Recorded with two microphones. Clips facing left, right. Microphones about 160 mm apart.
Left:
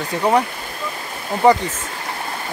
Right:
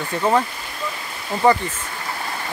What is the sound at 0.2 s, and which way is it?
Speech, 15° left (ahead or behind).